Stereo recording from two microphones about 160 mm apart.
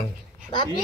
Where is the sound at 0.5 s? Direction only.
30° left (ahead or behind).